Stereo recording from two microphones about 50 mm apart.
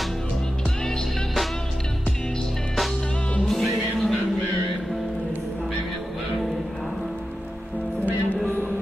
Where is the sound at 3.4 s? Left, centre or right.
Centre.